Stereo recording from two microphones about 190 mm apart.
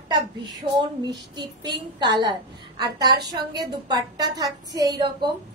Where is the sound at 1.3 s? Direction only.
25° right (ahead or behind).